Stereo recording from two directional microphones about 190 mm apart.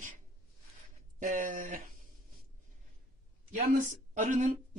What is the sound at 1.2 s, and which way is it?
Speech, 45° right (ahead or behind).